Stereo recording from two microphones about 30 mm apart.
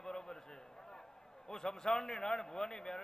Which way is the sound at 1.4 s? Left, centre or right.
Left.